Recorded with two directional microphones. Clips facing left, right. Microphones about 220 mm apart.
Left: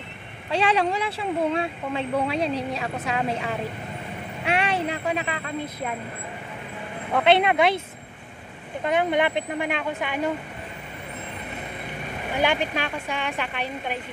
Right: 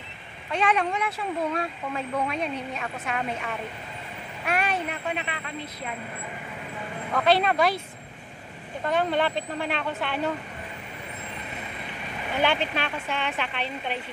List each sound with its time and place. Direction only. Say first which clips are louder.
0.5 s speech: left 3 dB; 30° left (ahead or behind)
4.5 s vehicle: left 3 dB; 30° left (ahead or behind)
7.2 s speech: left 3 dB; 25° left (ahead or behind)
8.8 s a woman's voice: left 2 dB; 15° left (ahead or behind)
12.4 s a woman's voice: left 1 dB; 10° left (ahead or behind)